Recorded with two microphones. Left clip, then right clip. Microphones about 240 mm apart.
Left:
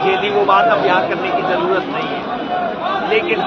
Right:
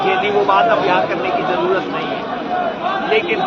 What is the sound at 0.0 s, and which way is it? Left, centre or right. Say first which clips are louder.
Speech: even; left.